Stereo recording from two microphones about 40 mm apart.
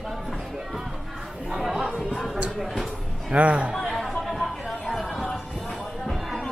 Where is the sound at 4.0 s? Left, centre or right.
Centre.